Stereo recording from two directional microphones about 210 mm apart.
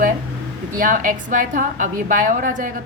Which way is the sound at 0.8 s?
40° right (ahead or behind).